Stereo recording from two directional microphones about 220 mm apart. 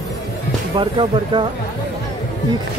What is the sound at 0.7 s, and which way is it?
Speech, 20° right (ahead or behind).